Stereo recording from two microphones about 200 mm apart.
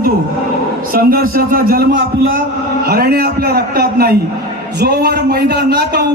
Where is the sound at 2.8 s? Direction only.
50° right (ahead or behind).